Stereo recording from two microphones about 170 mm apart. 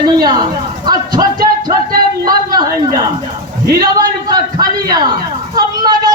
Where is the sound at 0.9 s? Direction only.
25° right (ahead or behind).